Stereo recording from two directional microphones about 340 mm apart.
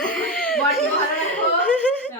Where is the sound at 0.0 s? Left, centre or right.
Centre.